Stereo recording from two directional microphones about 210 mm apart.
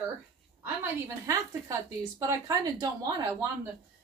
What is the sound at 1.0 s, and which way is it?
Speech, 15° right (ahead or behind).